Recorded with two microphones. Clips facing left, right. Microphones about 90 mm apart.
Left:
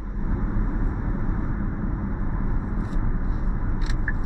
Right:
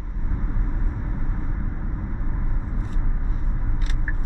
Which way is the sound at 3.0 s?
20° left (ahead or behind).